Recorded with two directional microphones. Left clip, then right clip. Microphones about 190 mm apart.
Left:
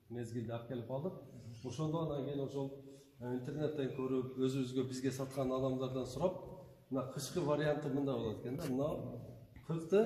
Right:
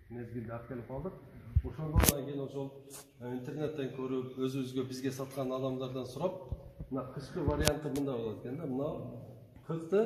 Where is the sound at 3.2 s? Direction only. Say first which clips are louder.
Right 2 dB; 10° left (ahead or behind).